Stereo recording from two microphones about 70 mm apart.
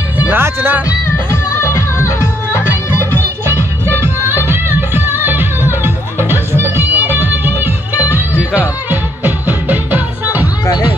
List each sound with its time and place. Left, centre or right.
0.2 s speech: right
1.0 s music: left
3.8 s music: right